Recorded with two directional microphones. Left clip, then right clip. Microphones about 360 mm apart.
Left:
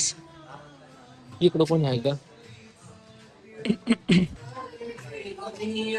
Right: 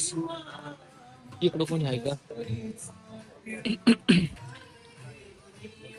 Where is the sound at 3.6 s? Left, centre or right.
Centre.